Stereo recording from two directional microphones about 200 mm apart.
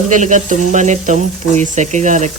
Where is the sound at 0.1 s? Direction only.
40° right (ahead or behind).